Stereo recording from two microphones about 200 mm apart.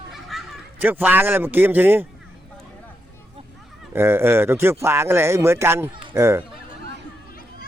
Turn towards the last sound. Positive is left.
turn(degrees=-15)  # may be behind; listen again after turning